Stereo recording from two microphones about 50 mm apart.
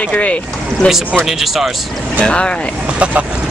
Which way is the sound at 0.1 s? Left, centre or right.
Left.